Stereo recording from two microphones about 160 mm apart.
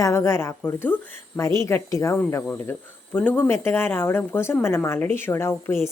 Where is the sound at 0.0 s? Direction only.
15° left (ahead or behind).